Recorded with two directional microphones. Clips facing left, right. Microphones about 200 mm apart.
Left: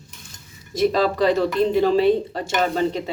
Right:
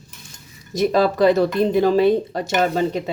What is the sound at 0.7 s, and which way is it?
Speech, 45° right (ahead or behind).